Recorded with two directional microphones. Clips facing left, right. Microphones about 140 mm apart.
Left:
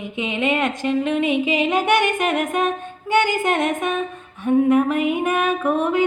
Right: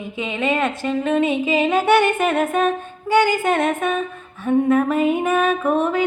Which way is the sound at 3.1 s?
20° left (ahead or behind).